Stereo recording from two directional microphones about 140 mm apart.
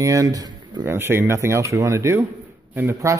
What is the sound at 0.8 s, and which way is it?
Speech, 15° right (ahead or behind).